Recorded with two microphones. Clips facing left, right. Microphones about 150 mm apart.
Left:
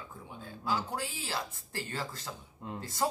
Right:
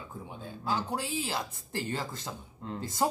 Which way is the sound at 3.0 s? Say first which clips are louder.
Right 3 dB; 20° right (ahead or behind).